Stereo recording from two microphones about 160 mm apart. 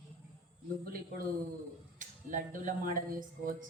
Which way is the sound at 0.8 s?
65° right (ahead or behind).